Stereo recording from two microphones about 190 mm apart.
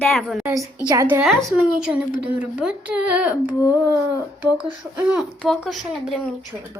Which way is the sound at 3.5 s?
20° left (ahead or behind).